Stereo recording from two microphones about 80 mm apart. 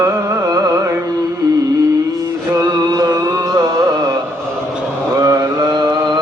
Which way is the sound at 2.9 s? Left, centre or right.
Right.